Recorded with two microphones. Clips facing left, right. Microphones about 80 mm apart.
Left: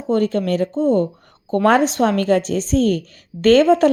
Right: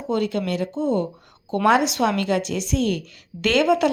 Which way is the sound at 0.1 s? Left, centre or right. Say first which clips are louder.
Left 5 dB; left.